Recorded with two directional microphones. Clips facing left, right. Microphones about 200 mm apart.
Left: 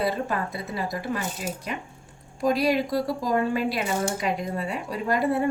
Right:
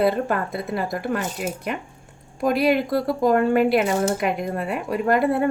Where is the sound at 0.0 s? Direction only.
55° right (ahead or behind).